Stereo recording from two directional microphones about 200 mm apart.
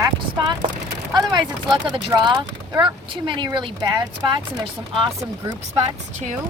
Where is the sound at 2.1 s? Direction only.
20° right (ahead or behind).